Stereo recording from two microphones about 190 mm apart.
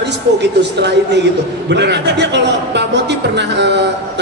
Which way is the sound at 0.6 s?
65° right (ahead or behind).